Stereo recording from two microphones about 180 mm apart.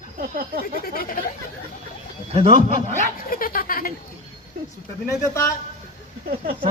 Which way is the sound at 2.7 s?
50° left (ahead or behind).